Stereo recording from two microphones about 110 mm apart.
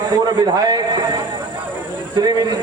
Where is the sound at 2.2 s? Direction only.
35° right (ahead or behind).